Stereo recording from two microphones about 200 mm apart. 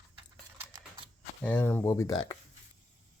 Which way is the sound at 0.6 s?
15° right (ahead or behind).